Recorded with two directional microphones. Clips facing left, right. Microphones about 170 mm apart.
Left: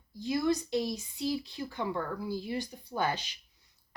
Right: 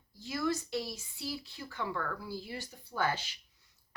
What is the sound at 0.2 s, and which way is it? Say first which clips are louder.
Speech: left 5 dB; 20° left (ahead or behind).